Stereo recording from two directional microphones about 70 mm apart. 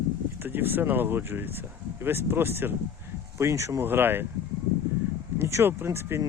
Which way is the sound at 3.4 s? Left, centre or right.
Right.